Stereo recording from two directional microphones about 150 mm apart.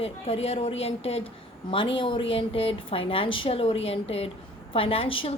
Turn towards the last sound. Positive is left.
turn(degrees=40)  # may be behind; listen again after turning